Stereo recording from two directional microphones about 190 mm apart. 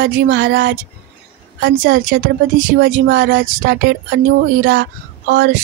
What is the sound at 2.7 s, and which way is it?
Speech, 70° right (ahead or behind).